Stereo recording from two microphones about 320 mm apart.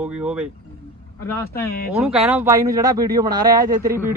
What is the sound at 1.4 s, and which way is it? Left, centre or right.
Speech, centre.